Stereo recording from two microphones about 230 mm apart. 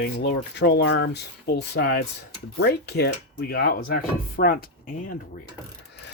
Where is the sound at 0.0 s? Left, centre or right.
Left.